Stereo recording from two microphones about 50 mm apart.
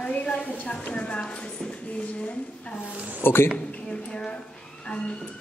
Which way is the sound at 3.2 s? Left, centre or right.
Left.